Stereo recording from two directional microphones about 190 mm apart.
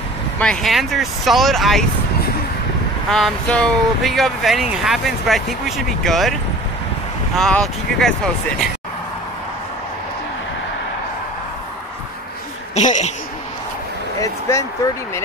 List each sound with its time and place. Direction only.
0.4 s speech: 5° left (ahead or behind)
3.1 s speech: centre (ahead or behind)
7.3 s speech: 5° left (ahead or behind)
12.7 s speech: 40° left (ahead or behind)
14.2 s speech: 15° left (ahead or behind)